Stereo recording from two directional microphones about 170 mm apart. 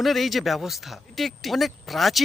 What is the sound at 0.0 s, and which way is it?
Speech, centre (ahead or behind).